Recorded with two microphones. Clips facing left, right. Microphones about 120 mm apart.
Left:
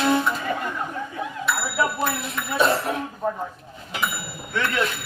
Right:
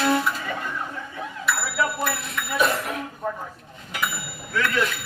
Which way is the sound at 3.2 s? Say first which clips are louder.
Left 3 dB; 15° left (ahead or behind).